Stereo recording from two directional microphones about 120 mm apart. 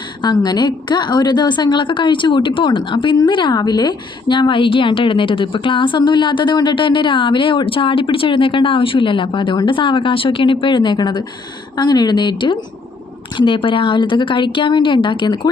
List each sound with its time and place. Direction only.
0.2 s a woman's voice: 35° left (ahead or behind)